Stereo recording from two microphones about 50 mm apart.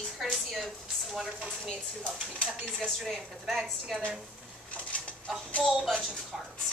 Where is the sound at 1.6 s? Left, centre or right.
Left.